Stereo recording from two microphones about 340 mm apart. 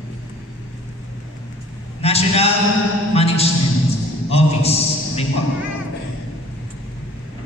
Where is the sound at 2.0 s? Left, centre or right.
Centre.